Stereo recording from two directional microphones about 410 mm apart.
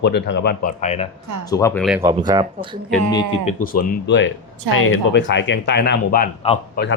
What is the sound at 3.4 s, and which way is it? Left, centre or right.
Speech, centre.